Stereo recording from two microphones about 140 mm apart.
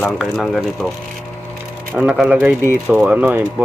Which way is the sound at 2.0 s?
5° right (ahead or behind).